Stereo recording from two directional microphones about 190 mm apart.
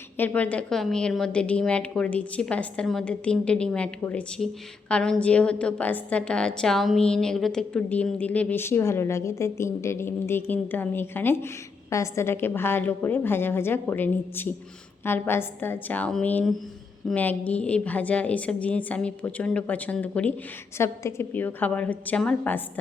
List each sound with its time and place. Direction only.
0.2 s a woman's voice: 10° left (ahead or behind)